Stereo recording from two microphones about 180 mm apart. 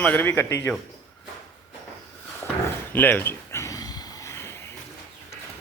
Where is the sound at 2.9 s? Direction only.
10° left (ahead or behind).